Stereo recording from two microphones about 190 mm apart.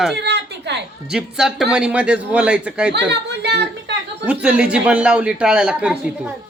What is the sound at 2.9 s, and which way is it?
Speech, 65° right (ahead or behind).